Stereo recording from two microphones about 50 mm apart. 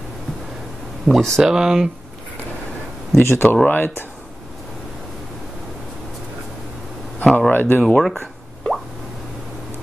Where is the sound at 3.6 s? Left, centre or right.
Left.